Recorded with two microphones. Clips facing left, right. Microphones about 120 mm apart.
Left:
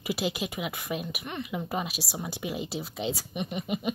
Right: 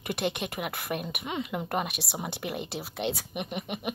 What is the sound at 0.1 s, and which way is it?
Speech, 60° right (ahead or behind).